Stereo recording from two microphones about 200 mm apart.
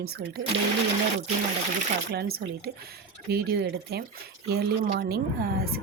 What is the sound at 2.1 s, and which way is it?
Speech, 50° right (ahead or behind).